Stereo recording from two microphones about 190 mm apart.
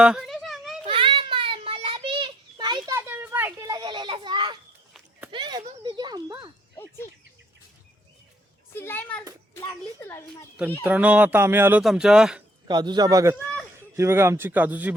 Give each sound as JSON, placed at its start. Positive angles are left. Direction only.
{"t": 0.0, "sound": "a sound", "side_deg": -5}
{"t": 0.9, "sound": "children playing", "side_deg": -25}
{"t": 3.1, "sound": "a sound", "side_deg": -10}
{"t": 3.8, "sound": "children playing", "side_deg": -25}
{"t": 5.3, "sound": "a sound", "side_deg": -25}
{"t": 5.8, "sound": "speech", "side_deg": -20}
{"t": 8.8, "sound": "speech", "side_deg": 10}
{"t": 10.8, "sound": "speech", "side_deg": -10}
{"t": 12.6, "sound": "speech", "side_deg": -25}